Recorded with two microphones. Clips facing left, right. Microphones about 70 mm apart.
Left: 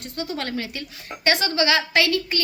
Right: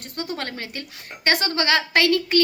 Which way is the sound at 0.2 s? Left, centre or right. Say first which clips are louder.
Left 2 dB; right.